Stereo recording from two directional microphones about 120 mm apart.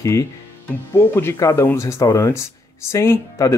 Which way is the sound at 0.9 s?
20° left (ahead or behind).